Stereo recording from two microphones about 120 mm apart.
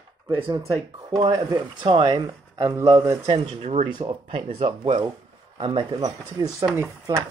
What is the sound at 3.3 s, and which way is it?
Speech, 60° right (ahead or behind).